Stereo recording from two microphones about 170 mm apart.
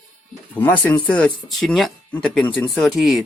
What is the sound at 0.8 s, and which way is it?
Speech, 5° left (ahead or behind).